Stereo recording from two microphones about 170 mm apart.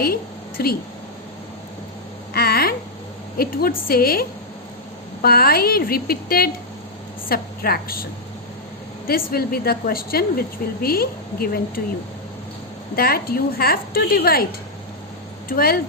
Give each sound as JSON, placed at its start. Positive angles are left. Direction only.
{"t": 0.0, "sound": "a sound", "side_deg": 60}
{"t": 2.3, "sound": "a sound", "side_deg": 65}
{"t": 3.3, "sound": "a woman's voice", "side_deg": 60}
{"t": 9.0, "sound": "a woman's voice", "side_deg": 65}
{"t": 13.0, "sound": "a woman's voice", "side_deg": 65}
{"t": 15.4, "sound": "a woman's voice", "side_deg": 60}